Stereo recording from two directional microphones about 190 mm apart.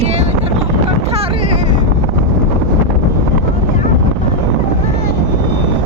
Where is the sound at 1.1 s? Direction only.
30° right (ahead or behind).